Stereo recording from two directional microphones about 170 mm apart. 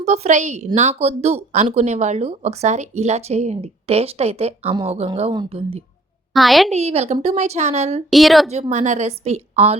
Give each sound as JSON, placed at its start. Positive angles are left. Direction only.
{"t": 0.0, "sound": "speech", "side_deg": -40}
{"t": 6.3, "sound": "a woman's voice", "side_deg": 0}
{"t": 6.7, "sound": "speech", "side_deg": -40}
{"t": 8.1, "sound": "a woman's voice", "side_deg": 0}
{"t": 8.7, "sound": "speech", "side_deg": -45}